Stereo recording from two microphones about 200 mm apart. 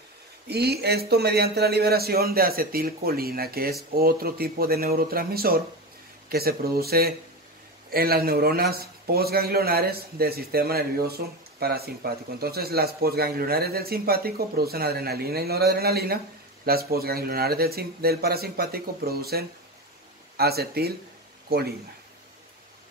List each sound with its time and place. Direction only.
0.5 s a man's voice: 55° right (ahead or behind)